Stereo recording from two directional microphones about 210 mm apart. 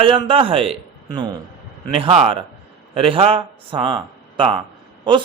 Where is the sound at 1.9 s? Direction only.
30° right (ahead or behind).